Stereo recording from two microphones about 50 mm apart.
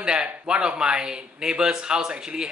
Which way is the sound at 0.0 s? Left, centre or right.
Centre.